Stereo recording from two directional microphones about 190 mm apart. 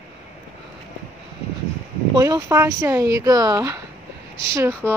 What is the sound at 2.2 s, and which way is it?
Speech, 20° right (ahead or behind).